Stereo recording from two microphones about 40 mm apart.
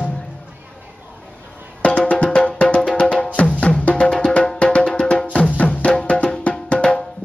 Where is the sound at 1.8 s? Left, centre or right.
Left.